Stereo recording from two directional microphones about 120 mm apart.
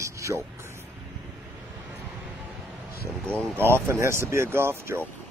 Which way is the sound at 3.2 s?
5° left (ahead or behind).